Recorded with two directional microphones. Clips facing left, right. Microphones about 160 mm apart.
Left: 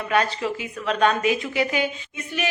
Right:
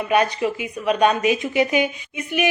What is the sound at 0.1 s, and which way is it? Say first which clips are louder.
A woman's voice: right 3 dB; 15° right (ahead or behind).